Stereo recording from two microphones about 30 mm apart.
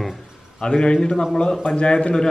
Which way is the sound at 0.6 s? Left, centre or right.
Left.